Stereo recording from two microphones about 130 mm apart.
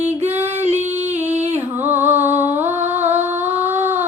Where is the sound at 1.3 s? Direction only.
55° right (ahead or behind).